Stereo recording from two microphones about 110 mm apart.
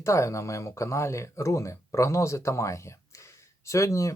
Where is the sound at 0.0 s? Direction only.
25° left (ahead or behind).